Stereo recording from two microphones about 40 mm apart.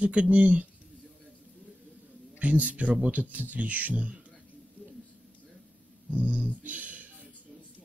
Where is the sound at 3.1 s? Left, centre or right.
Right.